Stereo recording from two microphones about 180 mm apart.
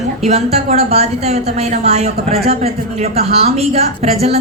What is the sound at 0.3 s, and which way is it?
A woman's voice, 40° right (ahead or behind).